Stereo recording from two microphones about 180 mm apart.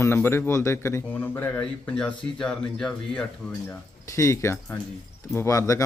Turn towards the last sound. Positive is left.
turn(degrees=20)  # may be behind; listen again after turning